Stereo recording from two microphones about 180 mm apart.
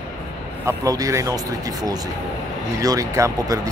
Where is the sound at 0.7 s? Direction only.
20° right (ahead or behind).